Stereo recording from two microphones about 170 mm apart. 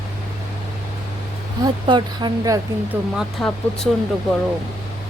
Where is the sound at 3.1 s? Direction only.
5° left (ahead or behind).